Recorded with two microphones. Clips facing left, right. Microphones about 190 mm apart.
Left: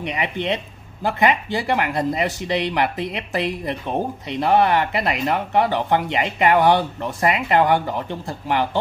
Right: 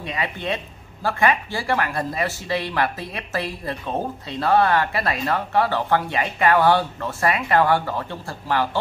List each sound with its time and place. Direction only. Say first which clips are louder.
0.0 s speech: left 3 dB; 20° left (ahead or behind)